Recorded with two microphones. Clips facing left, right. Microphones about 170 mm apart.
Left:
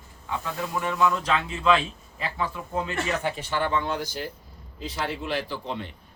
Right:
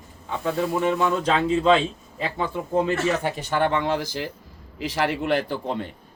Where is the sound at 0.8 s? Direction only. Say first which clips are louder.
Left 1 dB; 25° right (ahead or behind).